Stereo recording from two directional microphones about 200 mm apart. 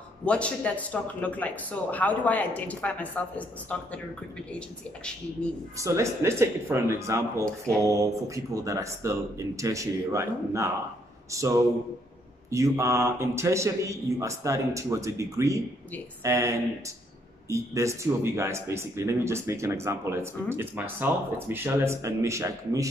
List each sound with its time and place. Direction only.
0.2 s speech: 5° left (ahead or behind)
5.8 s speech: 15° right (ahead or behind)